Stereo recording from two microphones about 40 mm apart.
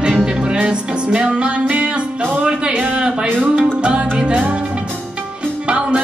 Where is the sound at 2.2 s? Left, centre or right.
Right.